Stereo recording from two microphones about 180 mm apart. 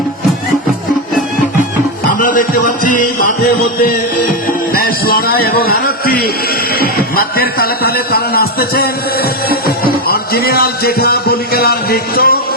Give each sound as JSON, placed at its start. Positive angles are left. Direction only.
{"t": 2.1, "sound": "music", "side_deg": 50}
{"t": 4.7, "sound": "a man's voice", "side_deg": 55}
{"t": 9.5, "sound": "music", "side_deg": 60}
{"t": 10.1, "sound": "speech", "side_deg": 60}